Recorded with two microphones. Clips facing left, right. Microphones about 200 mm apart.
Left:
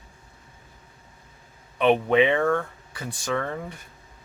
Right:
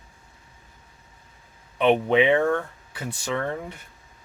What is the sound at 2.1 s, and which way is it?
Speech, 15° right (ahead or behind).